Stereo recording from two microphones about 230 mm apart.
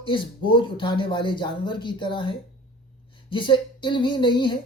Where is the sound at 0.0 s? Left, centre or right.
Left.